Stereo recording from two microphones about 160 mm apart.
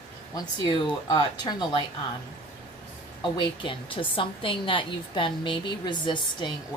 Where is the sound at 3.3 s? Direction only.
30° left (ahead or behind).